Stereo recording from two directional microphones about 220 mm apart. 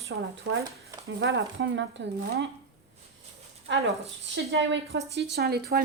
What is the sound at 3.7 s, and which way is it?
A woman's voice, 55° right (ahead or behind).